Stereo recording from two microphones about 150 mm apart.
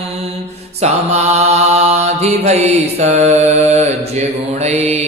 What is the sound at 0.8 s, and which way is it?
Mantra, 45° right (ahead or behind).